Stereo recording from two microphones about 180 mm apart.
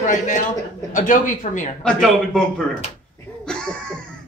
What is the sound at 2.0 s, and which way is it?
Speech, centre (ahead or behind).